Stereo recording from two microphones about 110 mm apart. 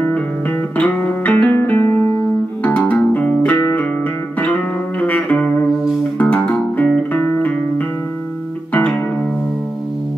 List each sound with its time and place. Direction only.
0.0 s music: 15° left (ahead or behind)
5.0 s music: 10° left (ahead or behind)